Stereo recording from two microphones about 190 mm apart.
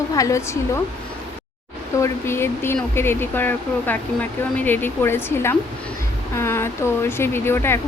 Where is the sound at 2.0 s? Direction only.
15° left (ahead or behind).